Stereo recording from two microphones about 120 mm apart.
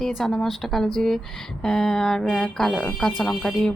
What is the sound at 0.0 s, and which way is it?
A woman's voice, centre (ahead or behind).